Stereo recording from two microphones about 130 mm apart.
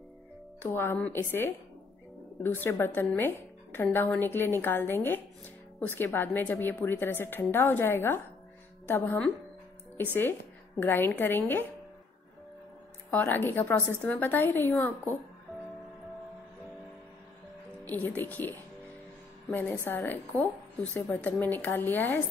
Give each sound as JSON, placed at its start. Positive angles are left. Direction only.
{"t": 0.6, "sound": "a woman's voice", "side_deg": 15}
{"t": 10.8, "sound": "a woman's voice", "side_deg": 15}
{"t": 13.1, "sound": "a woman's voice", "side_deg": 15}
{"t": 17.8, "sound": "a woman's voice", "side_deg": 15}
{"t": 19.5, "sound": "a woman's voice", "side_deg": 15}